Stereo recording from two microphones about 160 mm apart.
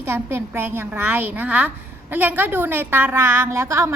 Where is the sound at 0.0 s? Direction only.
15° right (ahead or behind).